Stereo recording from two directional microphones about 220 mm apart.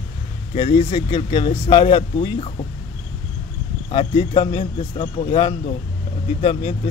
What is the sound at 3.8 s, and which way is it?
Speech, 20° left (ahead or behind).